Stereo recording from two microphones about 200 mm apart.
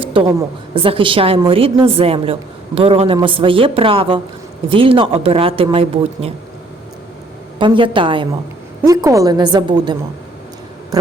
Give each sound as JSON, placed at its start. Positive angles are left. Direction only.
{"t": 0.0, "sound": "a sound", "side_deg": -25}
{"t": 0.3, "sound": "a woman's voice", "side_deg": -20}
{"t": 7.6, "sound": "a woman's voice", "side_deg": -25}